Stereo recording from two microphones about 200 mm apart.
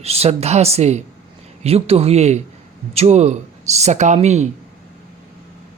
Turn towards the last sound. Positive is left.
turn(degrees=-35)  # may be behind; listen again after turning